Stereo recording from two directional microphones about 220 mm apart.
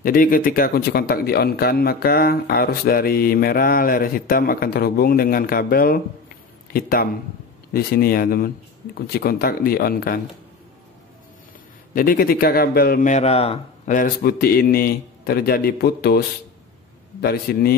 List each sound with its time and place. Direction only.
0.0 s a man's voice: 40° left (ahead or behind)
11.9 s a man's voice: 40° left (ahead or behind)